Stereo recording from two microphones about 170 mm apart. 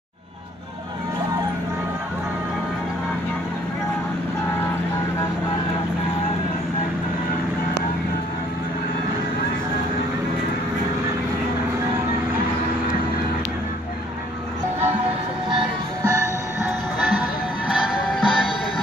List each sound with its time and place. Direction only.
15.5 s music: 20° right (ahead or behind)
17.6 s music: 5° right (ahead or behind)